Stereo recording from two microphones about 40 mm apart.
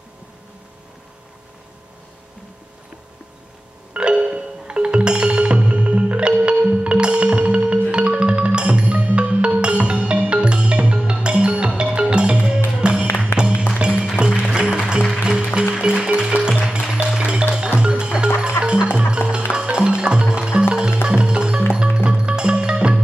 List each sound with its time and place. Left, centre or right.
3.9 s music: right
13.3 s music: left
13.7 s music: right